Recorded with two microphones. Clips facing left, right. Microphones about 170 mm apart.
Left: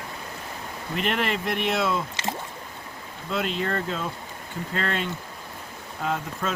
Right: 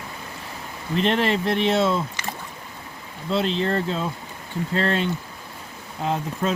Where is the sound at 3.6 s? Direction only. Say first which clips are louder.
Right 4 dB; 30° right (ahead or behind).